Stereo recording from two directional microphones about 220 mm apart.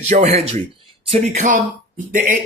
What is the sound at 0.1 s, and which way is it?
Speech, 30° right (ahead or behind).